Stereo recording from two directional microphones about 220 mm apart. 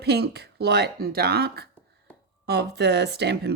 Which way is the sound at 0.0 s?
45° right (ahead or behind).